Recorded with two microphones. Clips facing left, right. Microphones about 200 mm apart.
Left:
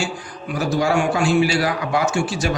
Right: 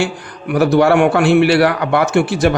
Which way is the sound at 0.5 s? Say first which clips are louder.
Right 8 dB; 65° right (ahead or behind).